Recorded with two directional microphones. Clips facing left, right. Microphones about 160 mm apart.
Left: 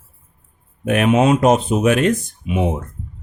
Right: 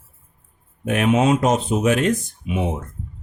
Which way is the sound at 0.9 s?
60° left (ahead or behind).